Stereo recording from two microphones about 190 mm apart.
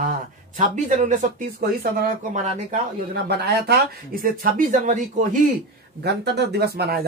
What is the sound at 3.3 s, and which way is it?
Speech, 60° right (ahead or behind).